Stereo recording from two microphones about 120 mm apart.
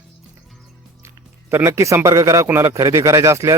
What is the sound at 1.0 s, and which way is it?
Speech, 20° right (ahead or behind).